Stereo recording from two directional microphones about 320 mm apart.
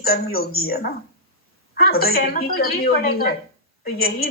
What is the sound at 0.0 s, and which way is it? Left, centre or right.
Speech, left.